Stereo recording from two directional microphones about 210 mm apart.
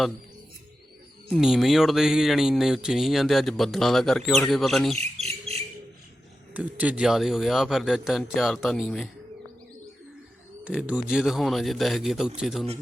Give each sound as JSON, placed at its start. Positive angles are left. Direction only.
{"t": 1.3, "sound": "speech", "side_deg": 0}
{"t": 4.9, "sound": "bird", "side_deg": -30}
{"t": 6.5, "sound": "speech", "side_deg": -5}
{"t": 10.6, "sound": "speech", "side_deg": -5}